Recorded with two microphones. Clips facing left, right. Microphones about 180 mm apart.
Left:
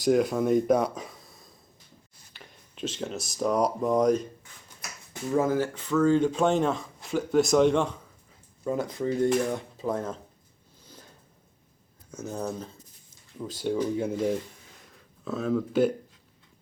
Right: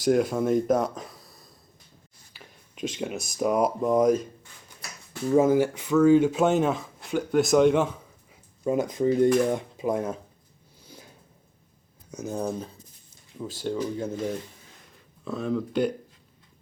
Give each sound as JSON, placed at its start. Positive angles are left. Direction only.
{"t": 0.0, "sound": "speech", "side_deg": 0}
{"t": 2.3, "sound": "a sound", "side_deg": -10}
{"t": 3.3, "sound": "speech", "side_deg": -5}
{"t": 5.3, "sound": "speech", "side_deg": -15}
{"t": 8.6, "sound": "speech", "side_deg": -15}
{"t": 10.8, "sound": "a sound", "side_deg": -10}
{"t": 12.1, "sound": "speech", "side_deg": -15}
{"t": 13.7, "sound": "speech", "side_deg": 10}
{"t": 15.2, "sound": "speech", "side_deg": 0}